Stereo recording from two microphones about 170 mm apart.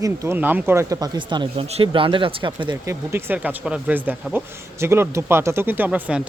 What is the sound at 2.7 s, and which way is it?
Speech, 10° right (ahead or behind).